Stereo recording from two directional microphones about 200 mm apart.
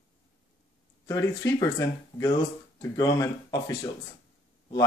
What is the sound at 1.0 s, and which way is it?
Speech, 15° left (ahead or behind).